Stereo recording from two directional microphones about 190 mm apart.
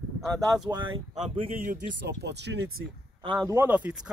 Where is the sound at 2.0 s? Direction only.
65° right (ahead or behind).